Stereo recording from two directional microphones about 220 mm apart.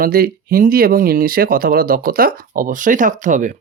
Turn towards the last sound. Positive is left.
turn(degrees=-35)  # may be behind; listen again after turning